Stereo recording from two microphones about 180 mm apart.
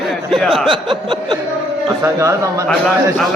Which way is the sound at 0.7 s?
25° right (ahead or behind).